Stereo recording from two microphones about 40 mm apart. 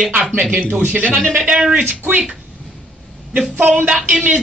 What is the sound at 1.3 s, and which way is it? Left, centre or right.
Speech, right.